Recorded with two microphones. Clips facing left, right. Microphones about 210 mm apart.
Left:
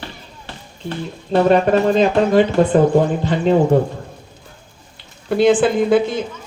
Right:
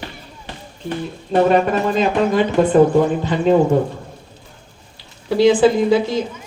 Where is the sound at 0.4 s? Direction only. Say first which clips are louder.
Right 1 dB; 15° right (ahead or behind).